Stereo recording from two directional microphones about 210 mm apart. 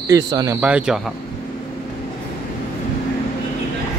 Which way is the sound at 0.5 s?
5° right (ahead or behind).